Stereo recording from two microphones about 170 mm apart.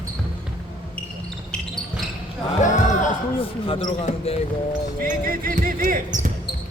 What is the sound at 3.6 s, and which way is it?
Speech, 30° left (ahead or behind).